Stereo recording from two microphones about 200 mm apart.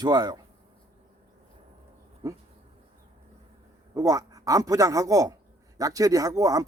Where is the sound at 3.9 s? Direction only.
15° right (ahead or behind).